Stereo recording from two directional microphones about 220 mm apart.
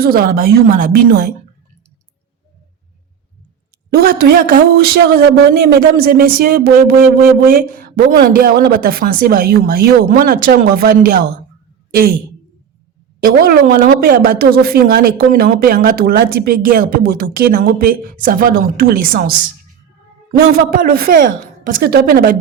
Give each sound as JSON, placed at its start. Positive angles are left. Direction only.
{"t": 0.0, "sound": "a woman's voice", "side_deg": -45}
{"t": 3.8, "sound": "a woman's voice", "side_deg": -45}
{"t": 13.2, "sound": "a woman's voice", "side_deg": -40}
{"t": 20.5, "sound": "a woman's voice", "side_deg": -40}